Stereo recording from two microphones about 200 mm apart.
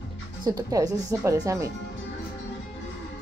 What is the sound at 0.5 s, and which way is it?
Speech, 20° right (ahead or behind).